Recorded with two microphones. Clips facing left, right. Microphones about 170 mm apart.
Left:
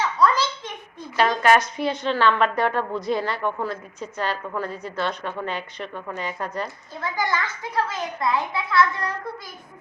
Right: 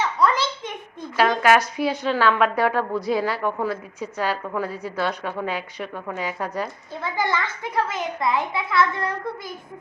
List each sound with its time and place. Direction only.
0.0 s a sound: 25° right (ahead or behind)
1.1 s a woman's voice: 5° right (ahead or behind)
7.0 s a child's voice: 25° right (ahead or behind)